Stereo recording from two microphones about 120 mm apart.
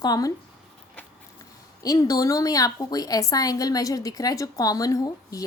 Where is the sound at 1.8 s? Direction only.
30° left (ahead or behind).